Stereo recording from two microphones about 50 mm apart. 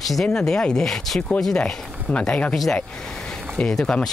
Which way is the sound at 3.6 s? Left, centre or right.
Centre.